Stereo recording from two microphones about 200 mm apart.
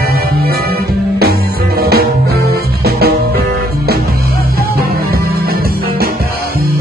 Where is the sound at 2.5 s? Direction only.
50° right (ahead or behind).